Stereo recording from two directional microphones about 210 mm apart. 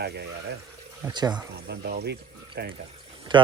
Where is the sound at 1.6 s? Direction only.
50° right (ahead or behind).